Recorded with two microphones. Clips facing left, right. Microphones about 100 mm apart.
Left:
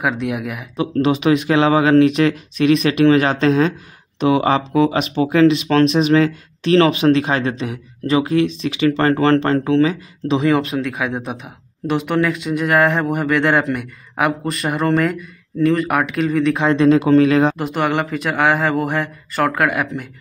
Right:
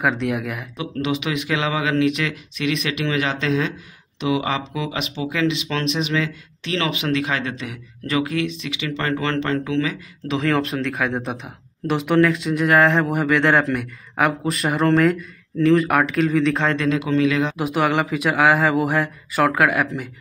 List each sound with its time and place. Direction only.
0.0 s speech: centre (ahead or behind)
0.7 s speech: 40° left (ahead or behind)
10.5 s speech: 5° left (ahead or behind)
16.6 s a man's voice: 25° left (ahead or behind)
17.0 s speech: 40° left (ahead or behind)
17.6 s speech: centre (ahead or behind)